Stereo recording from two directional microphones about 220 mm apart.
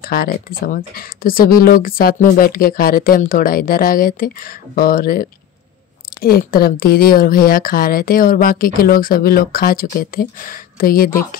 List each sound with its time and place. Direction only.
0.0 s speech: 45° left (ahead or behind)